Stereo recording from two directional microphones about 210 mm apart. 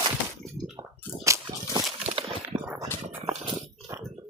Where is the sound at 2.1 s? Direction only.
30° right (ahead or behind).